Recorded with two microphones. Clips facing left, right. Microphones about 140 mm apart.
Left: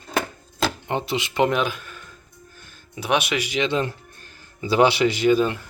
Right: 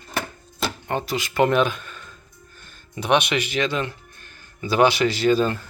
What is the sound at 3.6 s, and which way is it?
Music, 30° left (ahead or behind).